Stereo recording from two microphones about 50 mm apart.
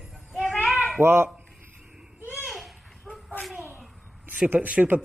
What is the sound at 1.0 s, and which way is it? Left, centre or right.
Speech, right.